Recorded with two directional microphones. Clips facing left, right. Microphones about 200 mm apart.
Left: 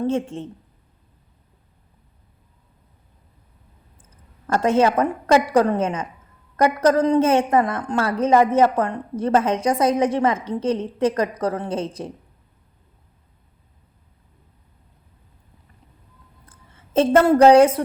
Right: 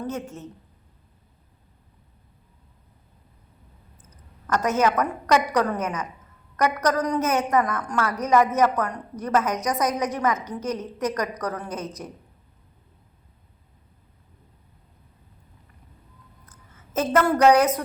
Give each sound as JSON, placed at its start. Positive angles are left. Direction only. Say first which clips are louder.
{"t": 0.0, "sound": "a woman's voice", "louder": "left 8 dB", "side_deg": 25}
{"t": 4.1, "sound": "a woman's voice", "louder": "left 3 dB", "side_deg": 30}
{"t": 16.5, "sound": "a woman's voice", "louder": "left 7 dB", "side_deg": 30}